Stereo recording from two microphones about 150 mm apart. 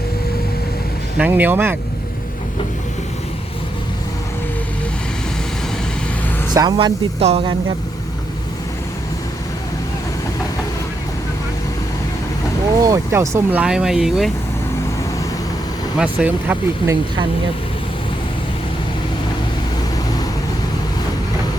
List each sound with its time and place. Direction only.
1.2 s speech: 10° right (ahead or behind)
6.5 s speech: 30° right (ahead or behind)
12.8 s speech: 20° right (ahead or behind); by 14.3 s 5° right (ahead or behind)
16.0 s speech: 10° right (ahead or behind)